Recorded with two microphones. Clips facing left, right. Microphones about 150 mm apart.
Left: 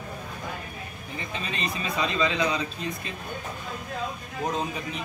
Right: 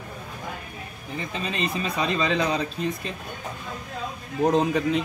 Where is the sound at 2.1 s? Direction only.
40° right (ahead or behind).